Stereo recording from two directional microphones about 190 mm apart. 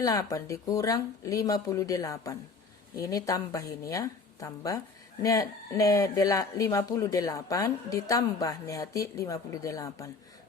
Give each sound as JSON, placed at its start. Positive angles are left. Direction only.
{"t": 0.0, "sound": "speech", "side_deg": 20}